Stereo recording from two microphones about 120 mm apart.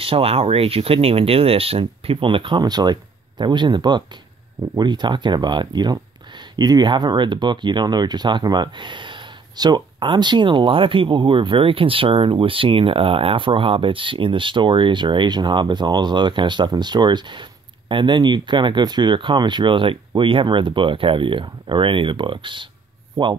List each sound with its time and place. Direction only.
0.0 s speech: 55° right (ahead or behind); by 23.3 s 40° right (ahead or behind)